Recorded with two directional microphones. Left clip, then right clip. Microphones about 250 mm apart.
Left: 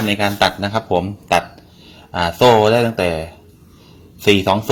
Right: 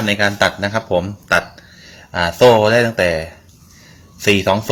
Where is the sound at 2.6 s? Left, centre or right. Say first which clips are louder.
Right 1 dB; right.